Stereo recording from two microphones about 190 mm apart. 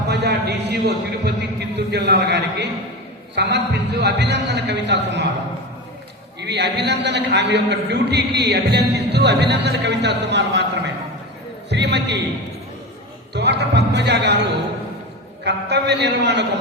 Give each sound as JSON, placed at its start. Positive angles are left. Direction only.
{"t": 0.1, "sound": "a sound", "side_deg": -60}
{"t": 1.4, "sound": "a man's voice", "side_deg": -60}
{"t": 6.4, "sound": "a man's voice", "side_deg": -65}
{"t": 13.3, "sound": "a man's voice", "side_deg": -65}
{"t": 15.4, "sound": "a man's voice", "side_deg": -65}